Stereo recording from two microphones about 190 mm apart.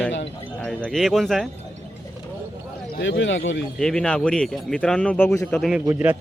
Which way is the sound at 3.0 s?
70° left (ahead or behind).